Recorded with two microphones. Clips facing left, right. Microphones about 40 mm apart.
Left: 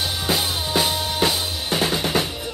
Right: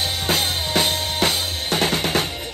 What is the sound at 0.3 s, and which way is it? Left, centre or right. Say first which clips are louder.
Drum: right 1 dB; right.